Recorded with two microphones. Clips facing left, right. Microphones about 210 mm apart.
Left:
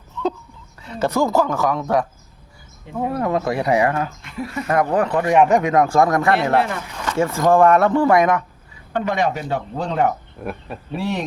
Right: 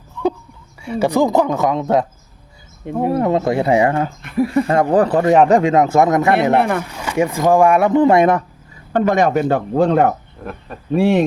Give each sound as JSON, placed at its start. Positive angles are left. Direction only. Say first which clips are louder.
{"t": 0.8, "sound": "speech", "louder": "right 4 dB", "side_deg": -10}
{"t": 3.1, "sound": "speech", "louder": "right 5 dB", "side_deg": -25}
{"t": 4.2, "sound": "speech", "louder": "right 11 dB", "side_deg": -55}
{"t": 4.5, "sound": "speech", "louder": "right 4 dB", "side_deg": -30}
{"t": 6.6, "sound": "speech", "louder": "right 4 dB", "side_deg": -55}
{"t": 6.9, "sound": "speech", "louder": "right 2 dB", "side_deg": -10}
{"t": 8.9, "sound": "speech", "louder": "right 6 dB", "side_deg": -45}
{"t": 10.4, "sound": "speech", "louder": "left 1 dB", "side_deg": 5}
{"t": 10.9, "sound": "speech", "louder": "right 10 dB", "side_deg": -55}